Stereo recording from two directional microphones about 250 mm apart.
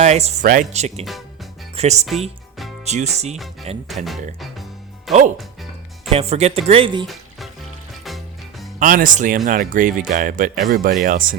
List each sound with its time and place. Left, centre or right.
0.0 s speech: right
3.3 s speech: centre
6.1 s speech: right
7.1 s music: centre
8.8 s speech: right